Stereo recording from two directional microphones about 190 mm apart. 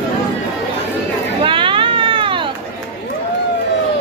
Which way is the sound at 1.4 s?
25° right (ahead or behind).